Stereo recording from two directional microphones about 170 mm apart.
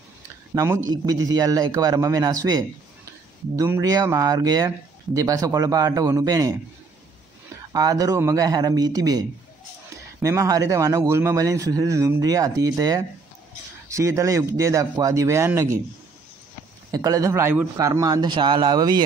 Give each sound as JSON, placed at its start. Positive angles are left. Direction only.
{"t": 0.6, "sound": "speech", "side_deg": -20}
{"t": 7.7, "sound": "speech", "side_deg": -20}
{"t": 10.2, "sound": "speech", "side_deg": -20}
{"t": 16.9, "sound": "speech", "side_deg": -20}